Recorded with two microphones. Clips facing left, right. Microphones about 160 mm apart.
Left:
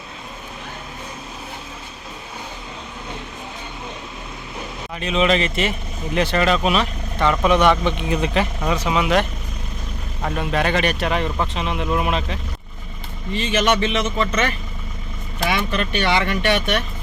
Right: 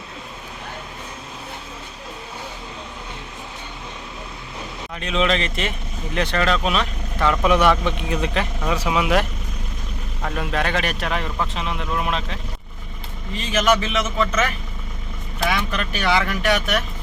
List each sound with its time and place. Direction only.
4.9 s speech: 5° left (ahead or behind)
10.2 s speech: 5° left (ahead or behind)